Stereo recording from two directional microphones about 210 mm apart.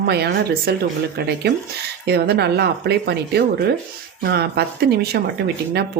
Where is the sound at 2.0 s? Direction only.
50° right (ahead or behind).